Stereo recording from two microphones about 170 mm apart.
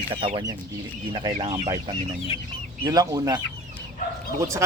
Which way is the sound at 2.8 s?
20° right (ahead or behind).